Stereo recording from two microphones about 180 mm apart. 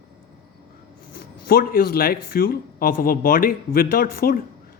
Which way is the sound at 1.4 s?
55° left (ahead or behind).